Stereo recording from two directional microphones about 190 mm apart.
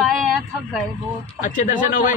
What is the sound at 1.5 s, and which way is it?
Speech, 45° left (ahead or behind).